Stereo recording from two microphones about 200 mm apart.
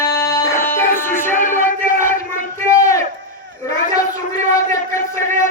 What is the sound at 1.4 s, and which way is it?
Music, 40° left (ahead or behind).